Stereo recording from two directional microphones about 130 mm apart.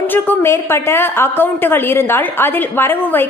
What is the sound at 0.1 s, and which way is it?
A woman's voice, 15° left (ahead or behind).